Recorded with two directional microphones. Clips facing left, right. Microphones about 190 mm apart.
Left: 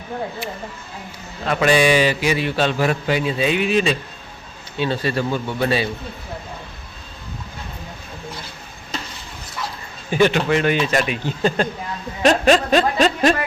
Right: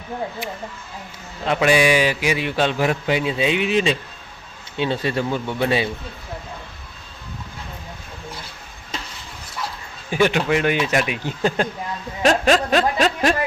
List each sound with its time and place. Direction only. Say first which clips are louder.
1.5 s a man's voice: left 1 dB; 10° right (ahead or behind)
10.1 s a man's voice: left 2 dB; 10° right (ahead or behind)
12.2 s music: left 2 dB; centre (ahead or behind)